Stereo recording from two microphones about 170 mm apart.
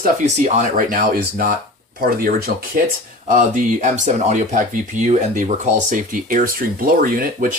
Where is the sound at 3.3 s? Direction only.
45° right (ahead or behind).